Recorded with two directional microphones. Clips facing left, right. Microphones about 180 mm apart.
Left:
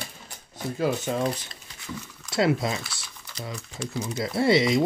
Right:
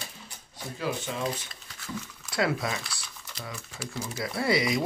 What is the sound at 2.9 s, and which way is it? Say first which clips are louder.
Crumpling: even; centre (ahead or behind).